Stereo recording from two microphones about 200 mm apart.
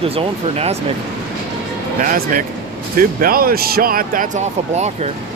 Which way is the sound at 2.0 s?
45° right (ahead or behind).